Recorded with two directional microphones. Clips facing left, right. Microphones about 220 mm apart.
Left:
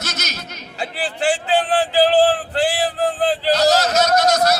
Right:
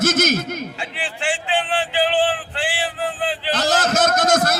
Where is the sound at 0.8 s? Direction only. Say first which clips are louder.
Left 5 dB; 40° left (ahead or behind).